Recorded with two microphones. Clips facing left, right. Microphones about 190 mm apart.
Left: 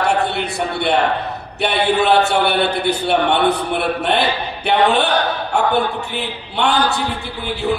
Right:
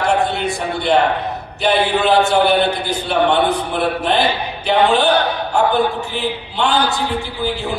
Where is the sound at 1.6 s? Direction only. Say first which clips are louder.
Right 1 dB; 65° left (ahead or behind).